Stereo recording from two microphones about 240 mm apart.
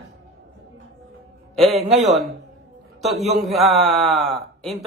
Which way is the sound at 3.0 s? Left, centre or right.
Centre.